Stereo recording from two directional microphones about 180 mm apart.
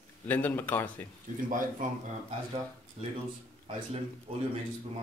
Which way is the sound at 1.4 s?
50° right (ahead or behind).